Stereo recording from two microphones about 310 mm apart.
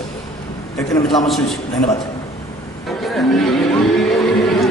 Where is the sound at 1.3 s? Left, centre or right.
Centre.